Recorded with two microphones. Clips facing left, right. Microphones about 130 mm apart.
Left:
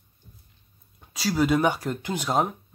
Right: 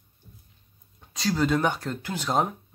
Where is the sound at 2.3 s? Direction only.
5° left (ahead or behind).